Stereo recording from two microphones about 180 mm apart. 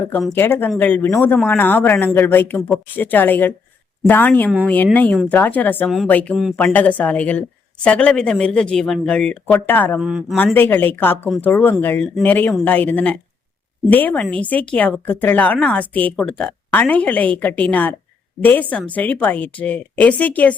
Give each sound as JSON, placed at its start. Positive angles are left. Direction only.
{"t": 0.1, "sound": "speech", "side_deg": 0}
{"t": 0.3, "sound": "speech", "side_deg": 10}
{"t": 10.0, "sound": "speech", "side_deg": -5}
{"t": 10.3, "sound": "speech", "side_deg": 10}
{"t": 18.9, "sound": "speech", "side_deg": 10}